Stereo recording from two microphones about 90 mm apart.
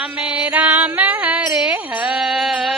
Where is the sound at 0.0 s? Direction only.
15° right (ahead or behind).